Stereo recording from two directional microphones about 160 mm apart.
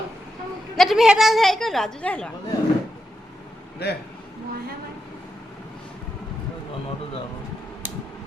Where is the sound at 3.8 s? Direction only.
90° left.